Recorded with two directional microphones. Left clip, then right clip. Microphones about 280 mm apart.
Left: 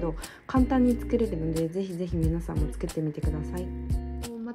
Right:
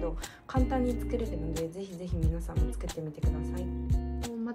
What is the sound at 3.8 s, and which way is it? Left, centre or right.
Music, centre.